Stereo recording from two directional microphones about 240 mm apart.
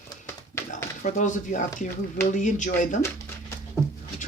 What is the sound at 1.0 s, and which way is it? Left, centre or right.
Speech, left.